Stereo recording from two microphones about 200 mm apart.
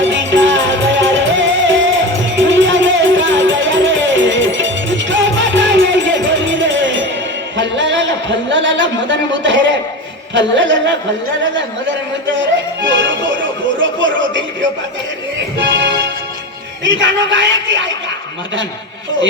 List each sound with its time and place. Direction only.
0.0 s music: 70° right (ahead or behind)
7.5 s a sound: 65° right (ahead or behind)
10.3 s a man's voice: 65° right (ahead or behind)
12.9 s music: 65° right (ahead or behind)
13.7 s a sound: 70° right (ahead or behind)
15.5 s music: 65° right (ahead or behind)
16.8 s a man's voice: 70° right (ahead or behind)